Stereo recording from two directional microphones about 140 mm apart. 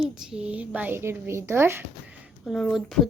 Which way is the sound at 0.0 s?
5° right (ahead or behind).